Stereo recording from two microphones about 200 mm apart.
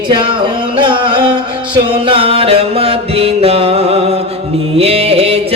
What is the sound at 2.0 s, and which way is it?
Music, 30° right (ahead or behind).